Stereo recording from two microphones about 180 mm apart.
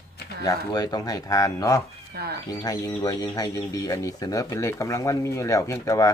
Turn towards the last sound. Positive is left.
turn(degrees=20)  # may be behind; listen again after turning